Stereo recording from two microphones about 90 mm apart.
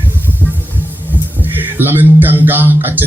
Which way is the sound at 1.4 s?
20° right (ahead or behind).